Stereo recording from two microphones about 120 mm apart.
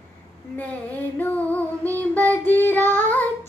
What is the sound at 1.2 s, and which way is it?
Child singing, 15° left (ahead or behind).